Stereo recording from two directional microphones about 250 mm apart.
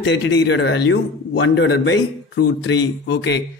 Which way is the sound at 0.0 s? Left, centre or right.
Left.